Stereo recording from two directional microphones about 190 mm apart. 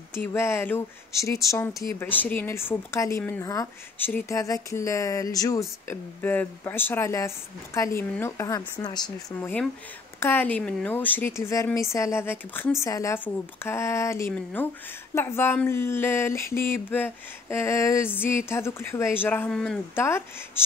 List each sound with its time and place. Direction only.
0.1 s a woman's voice: 10° left (ahead or behind)
10.2 s a woman's voice: 10° left (ahead or behind)